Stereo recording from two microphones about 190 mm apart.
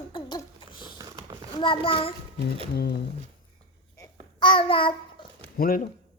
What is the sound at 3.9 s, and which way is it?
Babbling, 20° left (ahead or behind).